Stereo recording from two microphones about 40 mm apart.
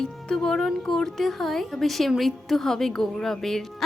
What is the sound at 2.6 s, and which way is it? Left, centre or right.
A woman's voice, centre.